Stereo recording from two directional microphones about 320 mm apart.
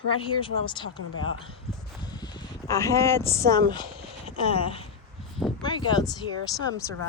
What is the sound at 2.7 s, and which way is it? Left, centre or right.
Speech, centre.